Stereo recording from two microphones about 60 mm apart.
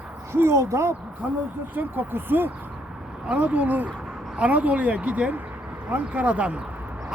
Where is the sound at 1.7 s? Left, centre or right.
Right.